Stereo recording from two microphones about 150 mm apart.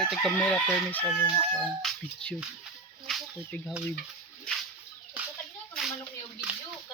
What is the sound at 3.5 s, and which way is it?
Speech, 10° left (ahead or behind).